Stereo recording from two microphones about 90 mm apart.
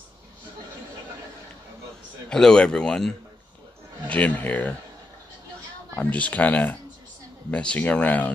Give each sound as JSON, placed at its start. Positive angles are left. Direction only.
{"t": 2.2, "sound": "a man's voice", "side_deg": 10}
{"t": 5.9, "sound": "a man's voice", "side_deg": 15}